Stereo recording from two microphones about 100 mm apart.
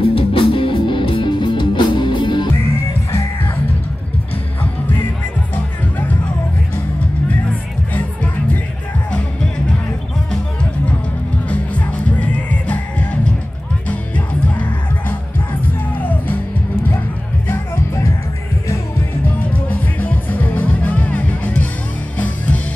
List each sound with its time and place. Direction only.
0.0 s music: 65° left (ahead or behind)
2.5 s music: 25° left (ahead or behind)
9.1 s music: 5° left (ahead or behind)
11.4 s music: 15° left (ahead or behind)
19.7 s music: 15° left (ahead or behind)